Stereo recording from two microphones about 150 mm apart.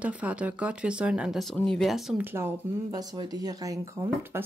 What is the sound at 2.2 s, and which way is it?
Speech, 15° right (ahead or behind).